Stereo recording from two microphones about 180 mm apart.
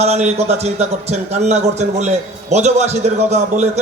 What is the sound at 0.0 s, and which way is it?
A man's voice, 35° right (ahead or behind).